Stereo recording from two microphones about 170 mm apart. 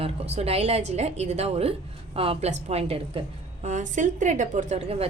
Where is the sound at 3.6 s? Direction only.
45° right (ahead or behind).